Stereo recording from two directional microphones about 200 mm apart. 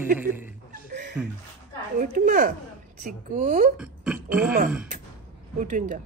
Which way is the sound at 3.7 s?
5° right (ahead or behind).